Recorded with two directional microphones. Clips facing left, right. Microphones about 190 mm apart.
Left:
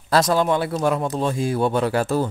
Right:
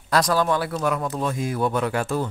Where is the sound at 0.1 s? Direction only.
25° left (ahead or behind).